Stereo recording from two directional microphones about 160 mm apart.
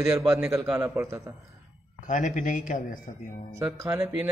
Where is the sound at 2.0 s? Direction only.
55° left (ahead or behind).